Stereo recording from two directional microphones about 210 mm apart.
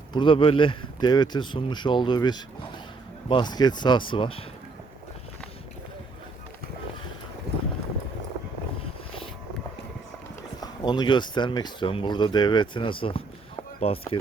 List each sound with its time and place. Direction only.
0.1 s speech: 25° left (ahead or behind)
10.6 s speech: 20° left (ahead or behind)